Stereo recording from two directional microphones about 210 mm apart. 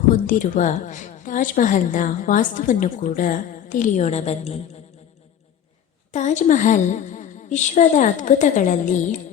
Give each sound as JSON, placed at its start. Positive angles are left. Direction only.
{"t": 0.1, "sound": "a woman's voice", "side_deg": 35}
{"t": 6.1, "sound": "a woman's voice", "side_deg": 35}